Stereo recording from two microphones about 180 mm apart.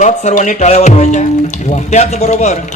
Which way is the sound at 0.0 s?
40° left (ahead or behind).